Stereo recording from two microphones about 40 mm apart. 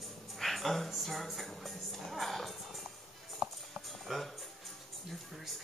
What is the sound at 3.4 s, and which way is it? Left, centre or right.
Music, centre.